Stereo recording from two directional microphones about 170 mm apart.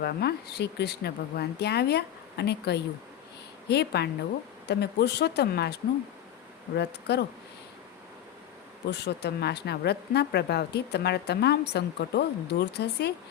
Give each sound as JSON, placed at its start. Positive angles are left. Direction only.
{"t": 0.0, "sound": "speech", "side_deg": 70}
{"t": 8.9, "sound": "speech", "side_deg": 80}